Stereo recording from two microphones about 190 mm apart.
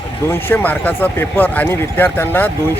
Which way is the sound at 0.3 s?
10° left (ahead or behind).